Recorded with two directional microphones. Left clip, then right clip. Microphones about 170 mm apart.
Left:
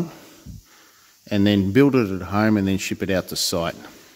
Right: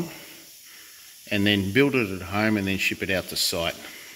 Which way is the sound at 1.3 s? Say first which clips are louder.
Left 3 dB; 60° left (ahead or behind).